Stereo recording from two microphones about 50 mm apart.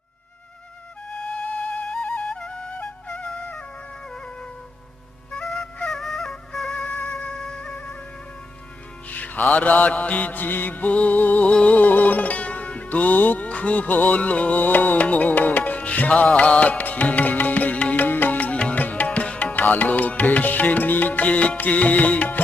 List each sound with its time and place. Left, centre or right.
2.3 s flute: centre
2.7 s music: left
5.9 s music: centre
6.7 s music: left
7.3 s music: centre
9.0 s music: left
11.8 s music: left